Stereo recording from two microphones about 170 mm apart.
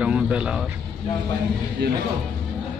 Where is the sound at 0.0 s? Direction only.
5° right (ahead or behind).